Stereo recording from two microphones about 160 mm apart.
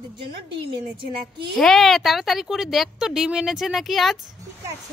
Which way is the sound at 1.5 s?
Centre (ahead or behind).